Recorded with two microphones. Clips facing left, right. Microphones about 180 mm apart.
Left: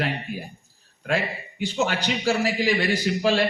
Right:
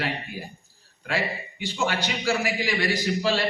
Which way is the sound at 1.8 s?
45° left (ahead or behind).